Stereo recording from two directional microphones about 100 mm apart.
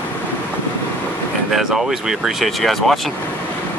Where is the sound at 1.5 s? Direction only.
5° right (ahead or behind).